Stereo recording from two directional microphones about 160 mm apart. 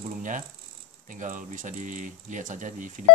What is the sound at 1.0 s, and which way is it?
Mantra, 55° right (ahead or behind).